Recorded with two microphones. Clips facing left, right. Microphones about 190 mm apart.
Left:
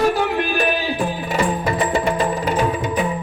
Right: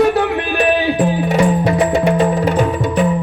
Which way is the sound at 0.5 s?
65° right (ahead or behind).